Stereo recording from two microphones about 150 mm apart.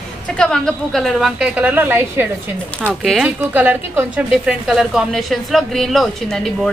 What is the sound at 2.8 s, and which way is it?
Speech, 5° left (ahead or behind).